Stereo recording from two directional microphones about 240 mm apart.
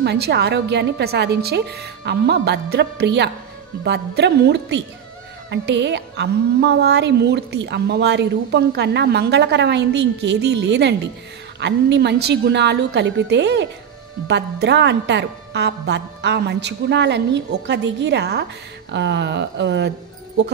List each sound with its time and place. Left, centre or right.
0.0 s a woman's voice: right